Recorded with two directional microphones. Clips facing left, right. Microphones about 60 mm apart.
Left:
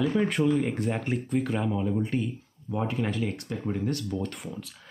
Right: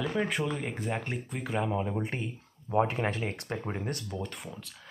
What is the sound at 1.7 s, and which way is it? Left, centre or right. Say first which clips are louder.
Speech: left 4 dB; right.